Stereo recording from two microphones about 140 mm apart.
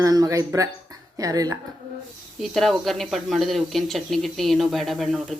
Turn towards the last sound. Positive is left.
turn(degrees=0)  # may be behind; listen again after turning